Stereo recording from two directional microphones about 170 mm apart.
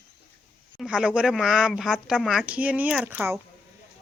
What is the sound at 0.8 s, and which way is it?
Speech, 5° right (ahead or behind).